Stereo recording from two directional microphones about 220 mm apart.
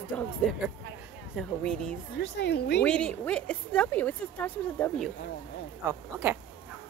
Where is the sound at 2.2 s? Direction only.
50° left (ahead or behind).